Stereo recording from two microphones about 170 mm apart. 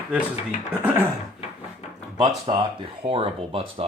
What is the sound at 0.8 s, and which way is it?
Speech, 15° right (ahead or behind).